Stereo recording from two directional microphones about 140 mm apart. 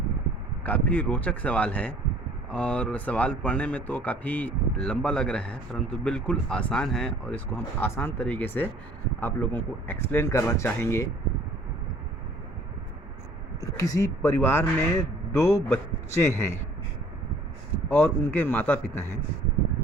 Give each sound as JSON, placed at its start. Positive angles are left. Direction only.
{"t": 0.6, "sound": "speech", "side_deg": 10}
{"t": 13.6, "sound": "speech", "side_deg": 25}
{"t": 17.8, "sound": "speech", "side_deg": 15}